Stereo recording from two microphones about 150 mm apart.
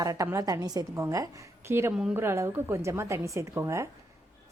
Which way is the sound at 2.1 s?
15° right (ahead or behind).